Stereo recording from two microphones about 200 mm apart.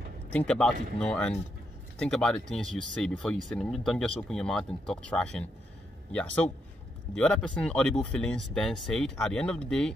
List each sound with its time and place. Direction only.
0.3 s speech: 5° left (ahead or behind)